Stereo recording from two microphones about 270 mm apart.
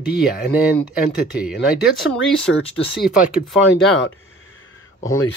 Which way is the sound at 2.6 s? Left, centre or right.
Left.